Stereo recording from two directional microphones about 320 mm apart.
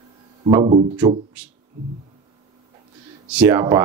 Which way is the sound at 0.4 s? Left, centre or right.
Centre.